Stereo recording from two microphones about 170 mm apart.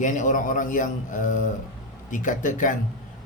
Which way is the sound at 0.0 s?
50° left (ahead or behind).